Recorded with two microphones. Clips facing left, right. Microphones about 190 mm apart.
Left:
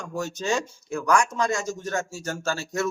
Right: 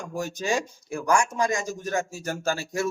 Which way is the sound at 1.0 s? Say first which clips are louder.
Left 1 dB; 30° right (ahead or behind).